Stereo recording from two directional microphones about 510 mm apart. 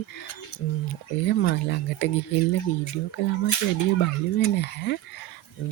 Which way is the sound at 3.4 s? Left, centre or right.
Left.